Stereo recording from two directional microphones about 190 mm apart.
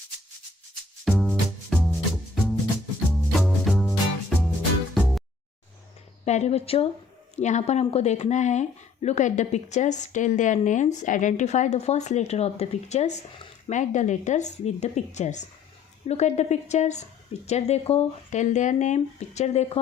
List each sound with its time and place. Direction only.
1.0 s music: centre (ahead or behind)
6.2 s speech: 35° left (ahead or behind)